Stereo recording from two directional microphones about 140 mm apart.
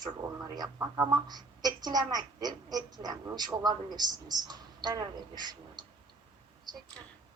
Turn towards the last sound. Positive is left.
turn(degrees=-30)  # may be behind; listen again after turning